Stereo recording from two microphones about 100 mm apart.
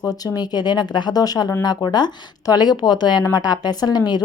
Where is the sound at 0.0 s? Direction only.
35° left (ahead or behind).